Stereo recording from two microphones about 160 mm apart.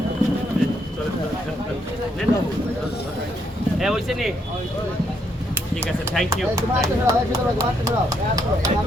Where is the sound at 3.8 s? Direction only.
Centre (ahead or behind).